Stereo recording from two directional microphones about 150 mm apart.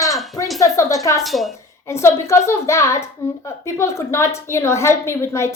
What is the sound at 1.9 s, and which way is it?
A woman's voice, 20° left (ahead or behind).